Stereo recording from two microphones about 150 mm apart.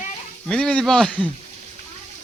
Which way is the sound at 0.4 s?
5° left (ahead or behind).